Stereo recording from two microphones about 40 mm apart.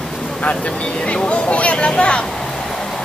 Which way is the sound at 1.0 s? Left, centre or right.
Left.